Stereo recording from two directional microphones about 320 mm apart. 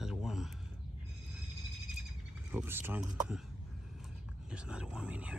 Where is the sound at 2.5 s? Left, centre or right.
Centre.